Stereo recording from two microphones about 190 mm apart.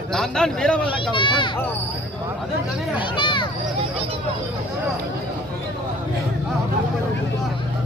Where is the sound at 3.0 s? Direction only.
25° left (ahead or behind).